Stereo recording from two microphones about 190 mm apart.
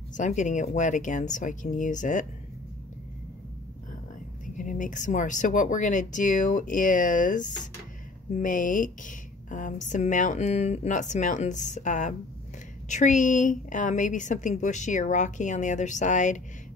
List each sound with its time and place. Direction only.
0.2 s speech: 40° left (ahead or behind)
4.6 s speech: 40° left (ahead or behind)